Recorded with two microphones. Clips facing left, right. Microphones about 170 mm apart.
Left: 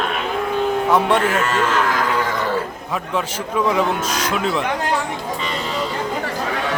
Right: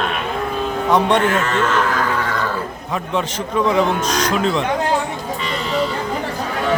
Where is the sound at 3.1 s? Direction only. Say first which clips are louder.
Right 2 dB; 5° left (ahead or behind).